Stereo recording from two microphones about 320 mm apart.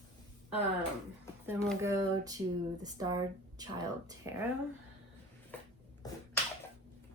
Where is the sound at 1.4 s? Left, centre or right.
Centre.